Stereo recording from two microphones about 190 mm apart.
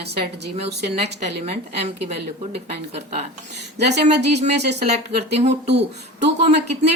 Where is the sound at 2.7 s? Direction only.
35° right (ahead or behind).